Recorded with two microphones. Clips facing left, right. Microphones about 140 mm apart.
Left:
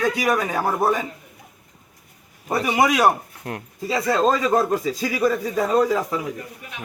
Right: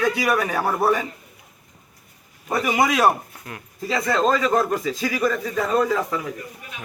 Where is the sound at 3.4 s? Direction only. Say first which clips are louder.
Left 8 dB; 65° left (ahead or behind).